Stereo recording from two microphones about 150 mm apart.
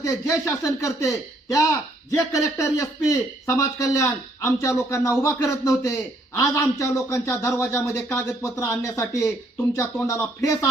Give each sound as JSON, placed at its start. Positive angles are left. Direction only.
{"t": 0.0, "sound": "a man's voice", "side_deg": 20}